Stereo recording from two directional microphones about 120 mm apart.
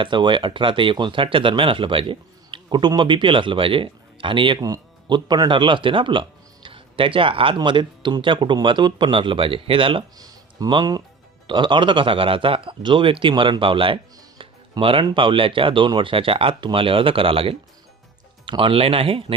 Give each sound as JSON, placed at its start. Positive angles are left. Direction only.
{"t": 0.0, "sound": "speech", "side_deg": -40}
{"t": 10.2, "sound": "speech", "side_deg": -35}